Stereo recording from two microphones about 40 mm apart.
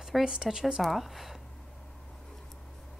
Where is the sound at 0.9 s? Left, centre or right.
Centre.